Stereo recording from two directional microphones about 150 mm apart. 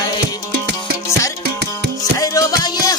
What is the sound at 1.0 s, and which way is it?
Music, 20° left (ahead or behind).